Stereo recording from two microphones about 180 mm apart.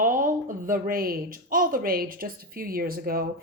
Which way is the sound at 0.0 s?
45° right (ahead or behind).